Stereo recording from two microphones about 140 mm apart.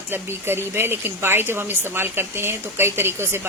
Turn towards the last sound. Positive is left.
turn(degrees=-15)  # may be behind; listen again after turning